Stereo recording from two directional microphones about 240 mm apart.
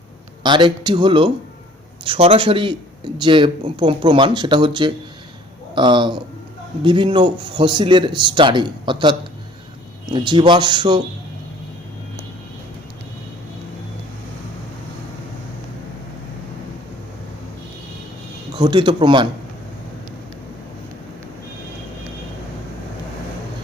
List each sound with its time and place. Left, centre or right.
0.4 s speech: centre
18.5 s speech: centre